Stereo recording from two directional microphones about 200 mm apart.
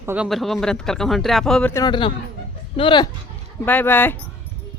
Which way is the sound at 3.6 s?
10° left (ahead or behind).